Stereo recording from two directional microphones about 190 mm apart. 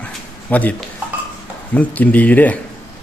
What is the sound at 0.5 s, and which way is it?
A man's voice, 5° left (ahead or behind).